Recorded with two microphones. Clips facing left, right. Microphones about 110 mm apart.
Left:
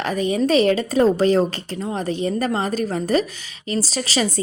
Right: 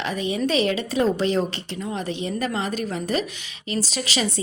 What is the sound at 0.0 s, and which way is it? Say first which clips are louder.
A woman's voice: left 4 dB; 45° left (ahead or behind).